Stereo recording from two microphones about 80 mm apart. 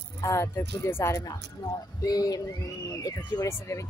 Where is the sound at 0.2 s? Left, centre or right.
Left.